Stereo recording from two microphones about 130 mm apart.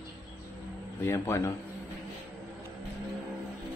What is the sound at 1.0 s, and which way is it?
Speech, 20° left (ahead or behind).